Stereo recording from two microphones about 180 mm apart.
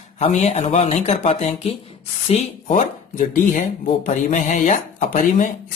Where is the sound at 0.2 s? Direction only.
35° left (ahead or behind).